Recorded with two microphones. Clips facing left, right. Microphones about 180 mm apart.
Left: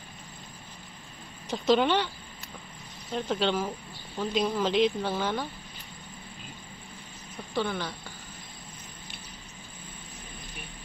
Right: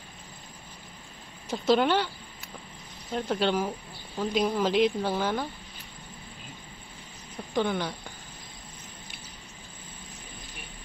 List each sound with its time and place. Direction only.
1.5 s speech: 10° right (ahead or behind)
3.2 s speech: 10° right (ahead or behind)
7.5 s speech: 15° right (ahead or behind)